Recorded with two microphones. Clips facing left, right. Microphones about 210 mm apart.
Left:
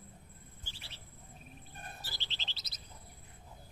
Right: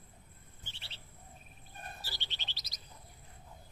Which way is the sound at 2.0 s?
15° right (ahead or behind).